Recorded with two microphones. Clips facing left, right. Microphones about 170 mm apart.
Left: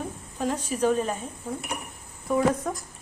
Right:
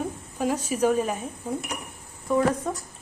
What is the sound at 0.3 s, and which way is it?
Speech, 10° right (ahead or behind).